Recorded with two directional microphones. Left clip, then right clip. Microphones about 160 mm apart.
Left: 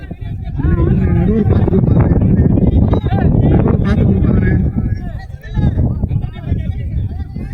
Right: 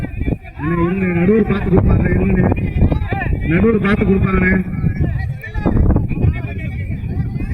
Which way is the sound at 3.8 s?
70° left (ahead or behind).